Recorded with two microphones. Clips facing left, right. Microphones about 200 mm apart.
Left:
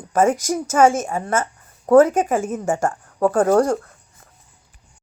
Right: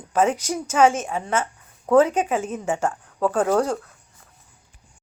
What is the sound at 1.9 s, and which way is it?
Speech, 45° left (ahead or behind).